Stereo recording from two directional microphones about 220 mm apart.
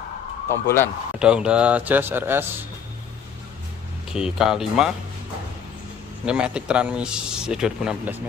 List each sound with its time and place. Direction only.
0.5 s speech: 10° left (ahead or behind)
1.2 s speech: 5° right (ahead or behind)
4.1 s a man's voice: centre (ahead or behind)
6.2 s a man's voice: 5° right (ahead or behind)